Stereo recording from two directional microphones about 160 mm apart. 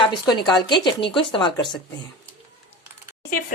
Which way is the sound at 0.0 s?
30° left (ahead or behind).